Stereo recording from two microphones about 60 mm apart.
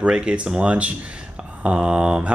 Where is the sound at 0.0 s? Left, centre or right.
Centre.